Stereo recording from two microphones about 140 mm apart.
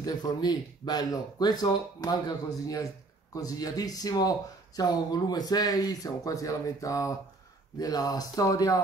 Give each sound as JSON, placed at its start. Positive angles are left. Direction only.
{"t": 0.0, "sound": "speech", "side_deg": 30}